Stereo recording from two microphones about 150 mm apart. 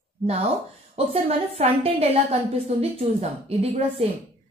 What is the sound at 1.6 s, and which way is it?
A woman's voice, 45° right (ahead or behind).